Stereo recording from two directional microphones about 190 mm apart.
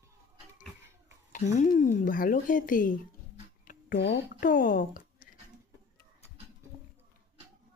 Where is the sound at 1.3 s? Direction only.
40° left (ahead or behind).